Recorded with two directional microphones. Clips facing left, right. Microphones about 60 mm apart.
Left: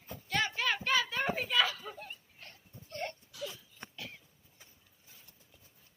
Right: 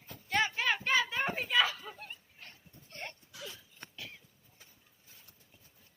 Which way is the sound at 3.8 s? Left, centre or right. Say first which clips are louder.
Left 2 dB; centre.